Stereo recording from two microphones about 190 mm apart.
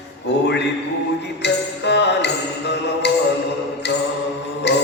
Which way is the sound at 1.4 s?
65° left (ahead or behind).